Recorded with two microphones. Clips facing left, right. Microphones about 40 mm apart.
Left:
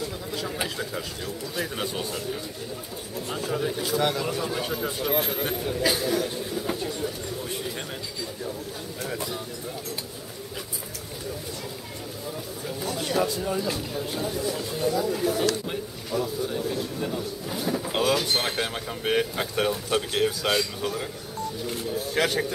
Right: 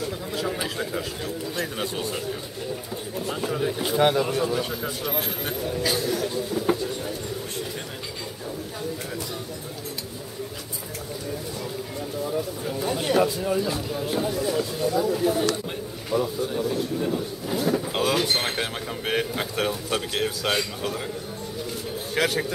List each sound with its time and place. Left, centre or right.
0.3 s speech: centre
3.3 s speech: centre
3.8 s speech: right
4.5 s speech: centre
6.5 s speech: centre
12.8 s speech: right
13.3 s speech: centre
16.1 s speech: right
16.4 s speech: centre
22.1 s speech: centre